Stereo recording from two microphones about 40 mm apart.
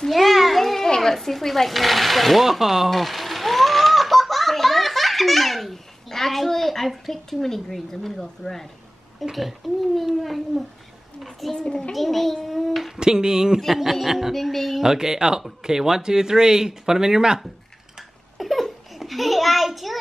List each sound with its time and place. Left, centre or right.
0.1 s children playing: centre
0.8 s speech: centre
2.9 s baby laughter: centre
9.2 s speech: centre
11.5 s a child's voice: centre
11.9 s speech: centre
13.0 s speech: centre
13.6 s speech: centre
14.8 s speech: centre
17.9 s a sound: centre